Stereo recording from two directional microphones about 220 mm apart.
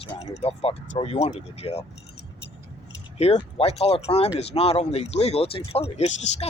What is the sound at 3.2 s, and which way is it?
Speech, 25° left (ahead or behind).